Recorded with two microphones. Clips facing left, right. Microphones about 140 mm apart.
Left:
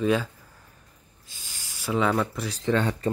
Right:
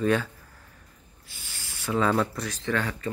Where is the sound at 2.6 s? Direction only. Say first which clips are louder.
Left 5 dB; 25° left (ahead or behind).